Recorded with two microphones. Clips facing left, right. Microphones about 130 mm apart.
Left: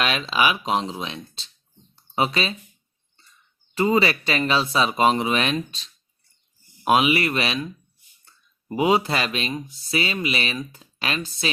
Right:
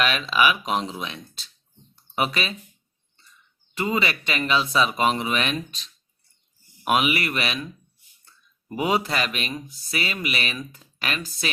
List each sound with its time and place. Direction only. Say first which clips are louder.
0.0 s speech: even; 30° left (ahead or behind)
3.8 s speech: left 5 dB; 35° left (ahead or behind)
6.8 s speech: left 3 dB; 30° left (ahead or behind)
8.7 s speech: left 3 dB; 30° left (ahead or behind)